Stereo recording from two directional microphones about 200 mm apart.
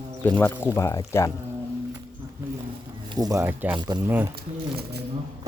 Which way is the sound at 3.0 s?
20° right (ahead or behind).